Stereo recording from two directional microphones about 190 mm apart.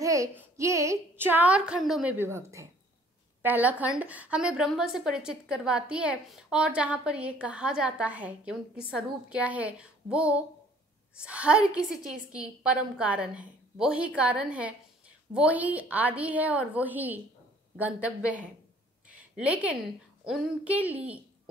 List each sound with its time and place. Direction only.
0.0 s child singing: 15° right (ahead or behind)
0.6 s a woman's voice: 15° right (ahead or behind)
19.0 s a sound: 5° right (ahead or behind)
20.2 s a woman's voice: 5° right (ahead or behind)